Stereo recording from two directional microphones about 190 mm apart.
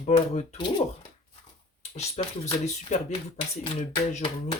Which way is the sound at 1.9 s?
35° left (ahead or behind).